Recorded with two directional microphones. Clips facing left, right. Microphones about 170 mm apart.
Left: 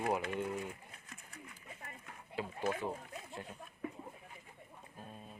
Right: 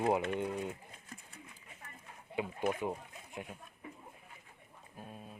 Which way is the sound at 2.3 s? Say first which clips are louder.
Right 3 dB; 15° right (ahead or behind).